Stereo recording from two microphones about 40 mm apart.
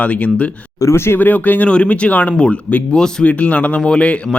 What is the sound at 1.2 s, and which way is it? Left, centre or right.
Speech, left.